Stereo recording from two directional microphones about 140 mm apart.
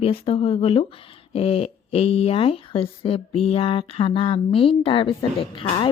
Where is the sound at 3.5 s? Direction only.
40° left (ahead or behind).